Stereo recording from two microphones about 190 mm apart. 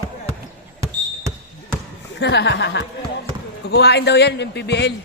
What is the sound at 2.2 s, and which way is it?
A man's voice, 65° left (ahead or behind).